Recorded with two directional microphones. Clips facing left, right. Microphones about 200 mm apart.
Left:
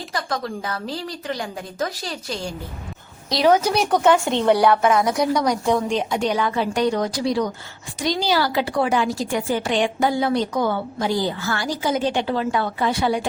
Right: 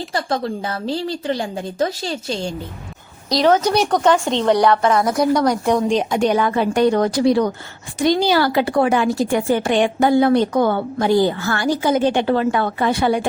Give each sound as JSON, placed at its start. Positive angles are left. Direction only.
{"t": 0.1, "sound": "a woman's voice", "side_deg": -30}
{"t": 3.2, "sound": "a woman's voice", "side_deg": 0}
{"t": 6.0, "sound": "speech", "side_deg": -55}